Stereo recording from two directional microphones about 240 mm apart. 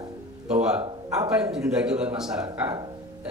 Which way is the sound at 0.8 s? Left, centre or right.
Centre.